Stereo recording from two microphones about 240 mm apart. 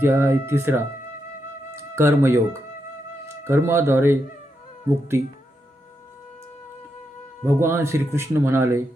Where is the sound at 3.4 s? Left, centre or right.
Centre.